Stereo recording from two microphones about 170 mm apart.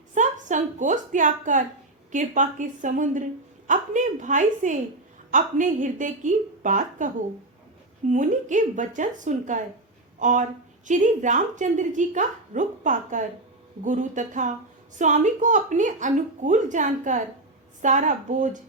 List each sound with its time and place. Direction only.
0.1 s a woman's voice: 45° right (ahead or behind)